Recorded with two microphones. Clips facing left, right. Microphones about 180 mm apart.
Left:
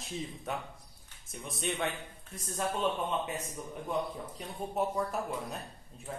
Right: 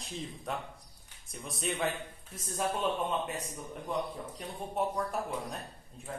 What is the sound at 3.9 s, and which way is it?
A woman's voice, centre (ahead or behind).